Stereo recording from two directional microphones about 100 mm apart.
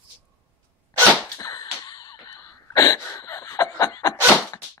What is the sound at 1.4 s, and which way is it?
Cough, 40° left (ahead or behind).